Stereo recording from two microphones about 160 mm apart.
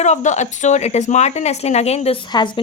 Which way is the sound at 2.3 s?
30° left (ahead or behind).